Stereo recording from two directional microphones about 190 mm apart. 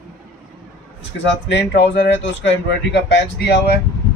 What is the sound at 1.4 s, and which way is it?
Speech, 65° left (ahead or behind).